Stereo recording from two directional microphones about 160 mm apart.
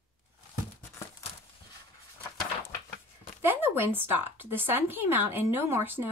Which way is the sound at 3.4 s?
15° right (ahead or behind).